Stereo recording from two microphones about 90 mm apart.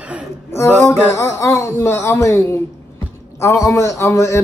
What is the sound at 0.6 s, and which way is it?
A man's voice, 25° left (ahead or behind).